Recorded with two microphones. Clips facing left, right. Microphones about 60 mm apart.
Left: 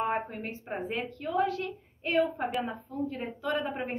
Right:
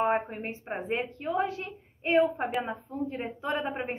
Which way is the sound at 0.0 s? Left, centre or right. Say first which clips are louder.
Right 3 dB; right.